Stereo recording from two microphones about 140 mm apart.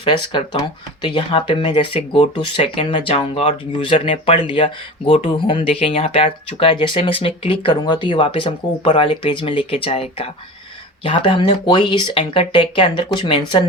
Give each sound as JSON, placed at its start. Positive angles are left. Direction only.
{"t": 0.0, "sound": "speech", "side_deg": 35}